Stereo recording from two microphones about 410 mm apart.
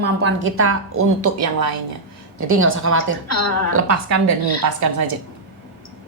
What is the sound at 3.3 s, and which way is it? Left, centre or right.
Speech, left.